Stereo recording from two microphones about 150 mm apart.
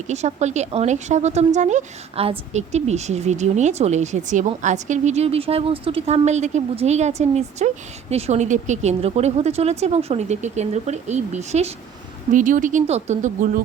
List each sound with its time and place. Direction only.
0.1 s speech: 50° right (ahead or behind)
12.3 s speech: 60° right (ahead or behind)